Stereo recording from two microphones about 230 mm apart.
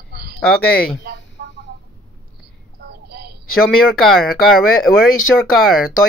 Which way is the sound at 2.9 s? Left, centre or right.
Right.